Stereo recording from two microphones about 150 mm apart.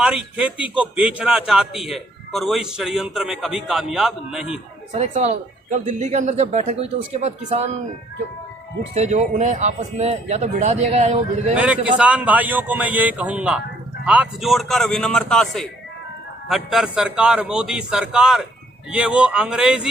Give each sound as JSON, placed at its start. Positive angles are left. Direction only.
{"t": 0.0, "sound": "a man's voice", "side_deg": -5}
{"t": 4.9, "sound": "speech", "side_deg": -50}
{"t": 9.0, "sound": "speech", "side_deg": -50}
{"t": 11.5, "sound": "a man's voice", "side_deg": -10}